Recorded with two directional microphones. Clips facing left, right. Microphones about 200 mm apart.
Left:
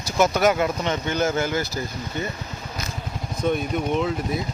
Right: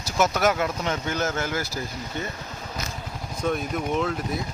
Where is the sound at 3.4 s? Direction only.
Centre (ahead or behind).